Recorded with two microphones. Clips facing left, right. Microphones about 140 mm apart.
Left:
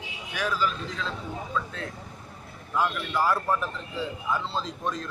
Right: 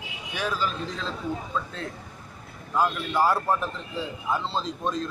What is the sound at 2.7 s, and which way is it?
Speech, 25° right (ahead or behind).